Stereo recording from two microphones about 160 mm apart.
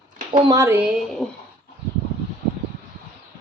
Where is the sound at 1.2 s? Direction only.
5° left (ahead or behind).